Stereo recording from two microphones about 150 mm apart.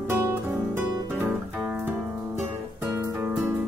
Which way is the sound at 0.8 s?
10° right (ahead or behind).